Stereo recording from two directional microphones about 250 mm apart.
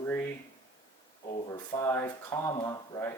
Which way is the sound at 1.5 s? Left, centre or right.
Centre.